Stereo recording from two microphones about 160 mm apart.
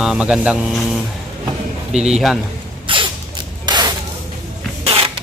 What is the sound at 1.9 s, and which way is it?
Speech, 5° right (ahead or behind).